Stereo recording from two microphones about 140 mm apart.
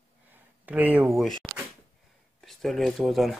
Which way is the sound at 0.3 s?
10° right (ahead or behind).